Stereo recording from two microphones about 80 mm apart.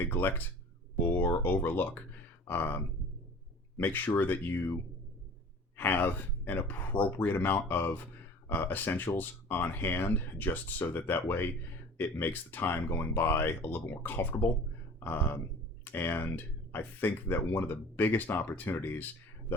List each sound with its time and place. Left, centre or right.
0.0 s speech: left
5.7 s speech: left